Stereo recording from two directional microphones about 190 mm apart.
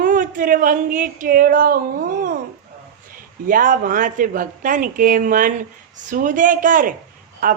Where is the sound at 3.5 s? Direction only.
45° right (ahead or behind).